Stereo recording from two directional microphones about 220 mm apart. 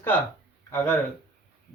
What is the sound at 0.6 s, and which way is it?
Speech, 10° left (ahead or behind).